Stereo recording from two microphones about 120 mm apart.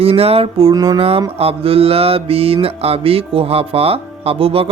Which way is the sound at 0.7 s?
30° right (ahead or behind).